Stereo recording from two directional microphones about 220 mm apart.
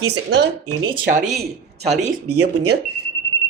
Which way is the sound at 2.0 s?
35° right (ahead or behind).